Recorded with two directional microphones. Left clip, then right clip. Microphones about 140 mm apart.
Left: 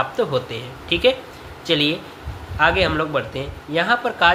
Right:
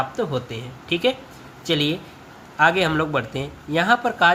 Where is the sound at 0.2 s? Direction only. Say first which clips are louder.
Left 4 dB; 25° right (ahead or behind).